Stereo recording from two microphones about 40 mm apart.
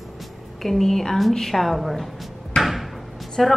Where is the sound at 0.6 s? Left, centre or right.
Centre.